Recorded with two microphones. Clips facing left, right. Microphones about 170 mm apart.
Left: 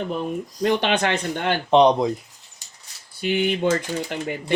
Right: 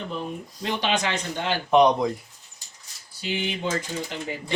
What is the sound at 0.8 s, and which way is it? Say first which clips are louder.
Speech: left 4 dB; 55° left (ahead or behind).